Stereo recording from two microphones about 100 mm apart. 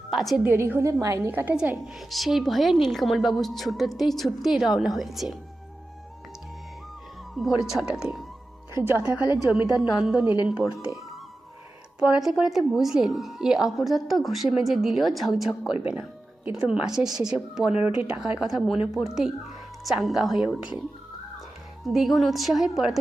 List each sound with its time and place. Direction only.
0.1 s speech: centre (ahead or behind)
0.4 s a woman's voice: 20° right (ahead or behind)
1.3 s speech: 20° right (ahead or behind)
1.9 s speech: centre (ahead or behind)
7.3 s speech: 5° right (ahead or behind)
8.7 s speech: 25° right (ahead or behind)
9.6 s a woman's voice: 5° right (ahead or behind)
15.9 s music: 10° right (ahead or behind)
16.6 s speech: 10° right (ahead or behind)
21.8 s speech: centre (ahead or behind)